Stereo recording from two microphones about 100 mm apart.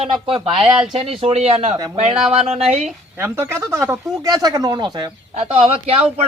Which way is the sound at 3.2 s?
25° right (ahead or behind).